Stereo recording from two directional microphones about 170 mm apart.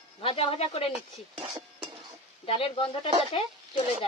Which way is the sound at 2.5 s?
30° left (ahead or behind).